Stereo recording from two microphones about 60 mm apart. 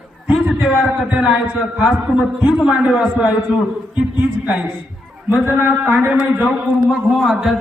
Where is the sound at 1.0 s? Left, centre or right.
Centre.